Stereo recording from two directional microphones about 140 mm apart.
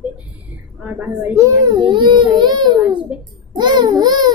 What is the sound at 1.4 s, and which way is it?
A child's voice, 25° right (ahead or behind).